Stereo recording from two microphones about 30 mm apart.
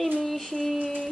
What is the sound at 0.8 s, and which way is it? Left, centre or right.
Music, left.